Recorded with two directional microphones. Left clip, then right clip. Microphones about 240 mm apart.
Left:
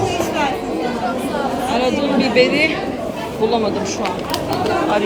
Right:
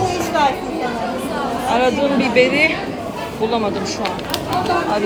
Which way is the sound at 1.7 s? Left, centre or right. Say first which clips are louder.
Right 2 dB; centre.